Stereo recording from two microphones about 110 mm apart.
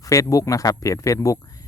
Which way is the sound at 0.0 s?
30° left (ahead or behind).